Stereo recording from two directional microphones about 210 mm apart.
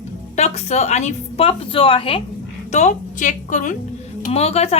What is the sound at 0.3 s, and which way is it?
A woman's voice, 30° left (ahead or behind).